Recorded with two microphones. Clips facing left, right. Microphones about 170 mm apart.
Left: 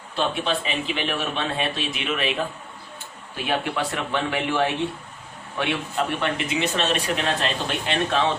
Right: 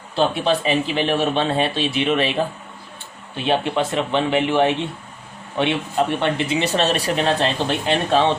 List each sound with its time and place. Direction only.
0.2 s a man's voice: 35° right (ahead or behind)